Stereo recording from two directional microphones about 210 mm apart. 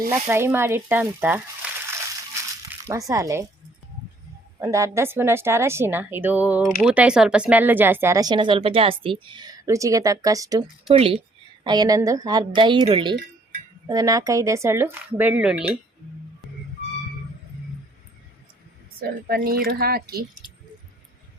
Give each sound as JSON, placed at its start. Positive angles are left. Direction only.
{"t": 0.1, "sound": "speech", "side_deg": -10}
{"t": 2.7, "sound": "music", "side_deg": -10}
{"t": 3.1, "sound": "speech", "side_deg": -15}
{"t": 4.6, "sound": "a woman's voice", "side_deg": -15}
{"t": 18.9, "sound": "speech", "side_deg": -45}